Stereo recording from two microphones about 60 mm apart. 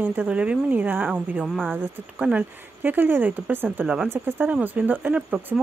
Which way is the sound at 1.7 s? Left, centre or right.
Right.